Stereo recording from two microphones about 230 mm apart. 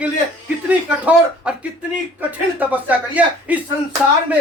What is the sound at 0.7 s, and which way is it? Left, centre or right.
Speech, centre.